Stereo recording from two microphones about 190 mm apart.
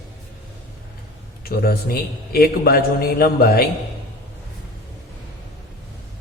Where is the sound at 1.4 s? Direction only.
50° left (ahead or behind).